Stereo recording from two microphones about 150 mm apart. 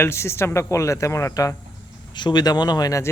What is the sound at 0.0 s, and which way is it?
Speech, 15° left (ahead or behind).